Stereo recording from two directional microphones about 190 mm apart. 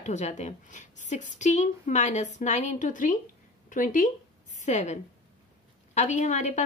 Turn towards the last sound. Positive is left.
turn(degrees=40)  # may be behind; listen again after turning